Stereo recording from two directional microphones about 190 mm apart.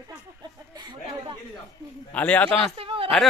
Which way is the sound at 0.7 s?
25° right (ahead or behind).